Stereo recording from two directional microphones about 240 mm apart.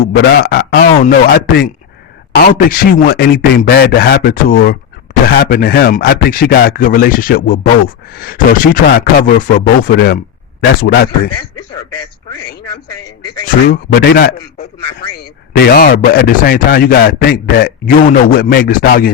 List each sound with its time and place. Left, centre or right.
0.4 s speech: left
13.4 s speech: left